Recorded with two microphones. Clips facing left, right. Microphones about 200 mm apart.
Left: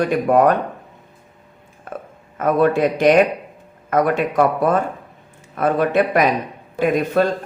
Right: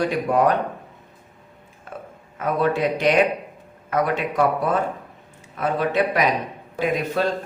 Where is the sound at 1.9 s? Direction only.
55° left (ahead or behind).